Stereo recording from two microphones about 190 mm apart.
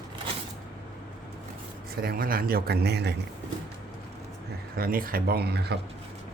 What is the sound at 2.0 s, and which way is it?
Speech, 50° right (ahead or behind).